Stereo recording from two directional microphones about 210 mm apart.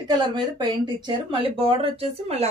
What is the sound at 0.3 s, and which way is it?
Speech, 20° right (ahead or behind).